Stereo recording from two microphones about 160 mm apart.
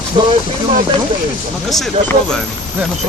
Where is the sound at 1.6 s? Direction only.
Centre (ahead or behind).